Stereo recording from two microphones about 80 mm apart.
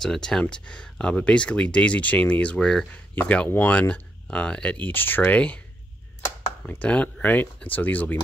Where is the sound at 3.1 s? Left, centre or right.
Left.